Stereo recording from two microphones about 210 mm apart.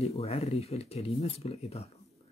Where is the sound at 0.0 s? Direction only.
30° left (ahead or behind).